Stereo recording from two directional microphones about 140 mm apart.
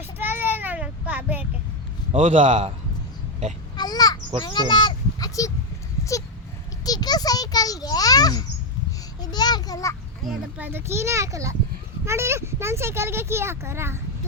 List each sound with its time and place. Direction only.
0.2 s child singing: 15° right (ahead or behind)
2.1 s speech: 60° right (ahead or behind)
3.8 s a sound: 30° left (ahead or behind)
4.4 s speech: 30° left (ahead or behind)
6.8 s a sound: 30° left (ahead or behind)
10.6 s a child's voice: 15° right (ahead or behind)